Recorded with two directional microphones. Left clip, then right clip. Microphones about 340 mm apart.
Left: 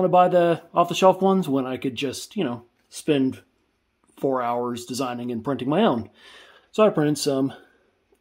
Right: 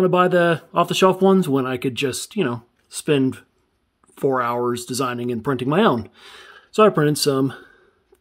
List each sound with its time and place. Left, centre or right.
0.0 s speech: right